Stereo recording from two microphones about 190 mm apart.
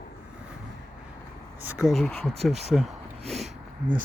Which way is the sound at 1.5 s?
10° right (ahead or behind).